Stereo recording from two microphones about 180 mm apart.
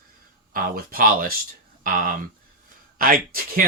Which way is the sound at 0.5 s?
50° right (ahead or behind).